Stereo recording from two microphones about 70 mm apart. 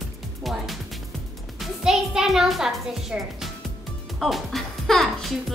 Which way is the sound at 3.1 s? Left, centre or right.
Right.